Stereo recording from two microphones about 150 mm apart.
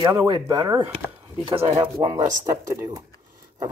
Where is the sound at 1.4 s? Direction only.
40° right (ahead or behind).